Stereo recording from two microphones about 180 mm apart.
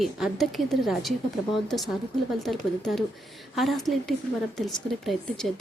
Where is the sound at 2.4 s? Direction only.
Centre (ahead or behind).